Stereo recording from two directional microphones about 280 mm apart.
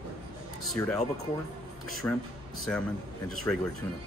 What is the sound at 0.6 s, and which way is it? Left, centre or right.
Speech, centre.